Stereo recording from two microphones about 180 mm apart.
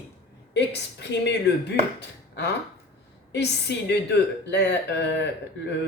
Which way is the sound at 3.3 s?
70° left (ahead or behind).